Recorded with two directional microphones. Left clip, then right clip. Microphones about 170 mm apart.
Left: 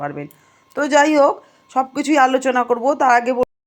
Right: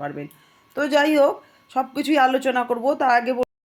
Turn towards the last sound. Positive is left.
turn(degrees=25)  # may be behind; listen again after turning